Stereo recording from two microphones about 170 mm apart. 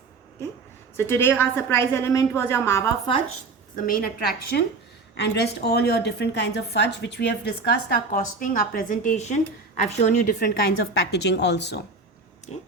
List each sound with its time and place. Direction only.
0.9 s a woman's voice: 15° left (ahead or behind)
3.8 s a woman's voice: 60° left (ahead or behind)
5.1 s a woman's voice: 80° left
8.1 s a woman's voice: 55° left (ahead or behind)
10.9 s a woman's voice: 75° left (ahead or behind)
12.5 s speech: 40° left (ahead or behind)